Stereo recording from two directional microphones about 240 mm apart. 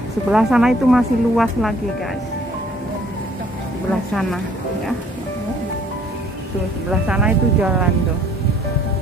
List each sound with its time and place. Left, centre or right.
0.3 s speech: centre
4.1 s speech: centre
6.9 s speech: centre